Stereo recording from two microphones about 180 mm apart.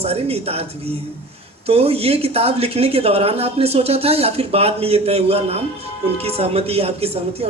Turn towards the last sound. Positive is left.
turn(degrees=-35)  # may be behind; listen again after turning